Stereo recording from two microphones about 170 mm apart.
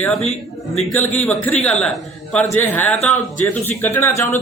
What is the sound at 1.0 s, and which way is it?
Speech, 10° left (ahead or behind).